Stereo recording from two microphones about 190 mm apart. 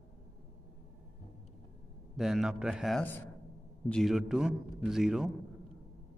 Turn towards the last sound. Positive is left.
turn(degrees=0)  # may be behind; listen again after turning